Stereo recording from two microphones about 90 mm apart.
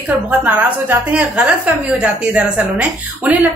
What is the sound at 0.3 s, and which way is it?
A woman's voice, 15° right (ahead or behind).